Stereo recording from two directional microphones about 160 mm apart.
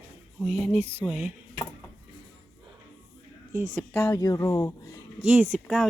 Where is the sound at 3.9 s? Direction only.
15° left (ahead or behind).